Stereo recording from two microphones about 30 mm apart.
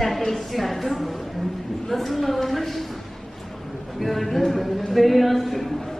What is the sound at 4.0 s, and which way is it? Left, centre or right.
A woman's voice, centre.